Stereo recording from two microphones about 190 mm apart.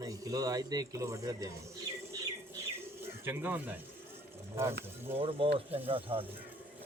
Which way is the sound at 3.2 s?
10° right (ahead or behind).